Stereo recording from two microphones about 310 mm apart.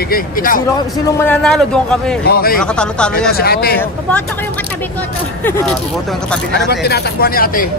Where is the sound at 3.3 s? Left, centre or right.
Left.